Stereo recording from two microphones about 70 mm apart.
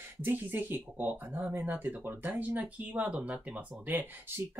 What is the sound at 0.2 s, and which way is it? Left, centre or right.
Speech, right.